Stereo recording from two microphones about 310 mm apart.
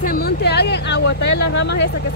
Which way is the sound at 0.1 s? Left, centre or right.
Left.